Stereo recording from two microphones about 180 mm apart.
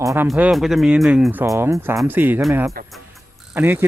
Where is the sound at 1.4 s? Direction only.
15° right (ahead or behind).